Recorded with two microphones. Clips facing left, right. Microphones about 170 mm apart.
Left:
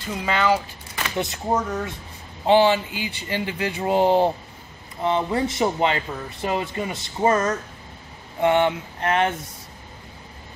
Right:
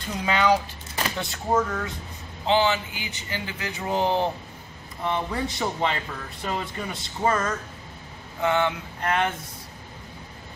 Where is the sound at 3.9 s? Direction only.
20° left (ahead or behind).